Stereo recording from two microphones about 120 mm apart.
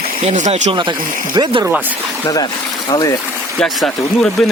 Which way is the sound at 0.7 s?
40° right (ahead or behind).